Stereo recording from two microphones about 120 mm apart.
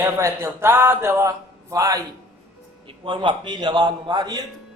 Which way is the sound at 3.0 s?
40° right (ahead or behind).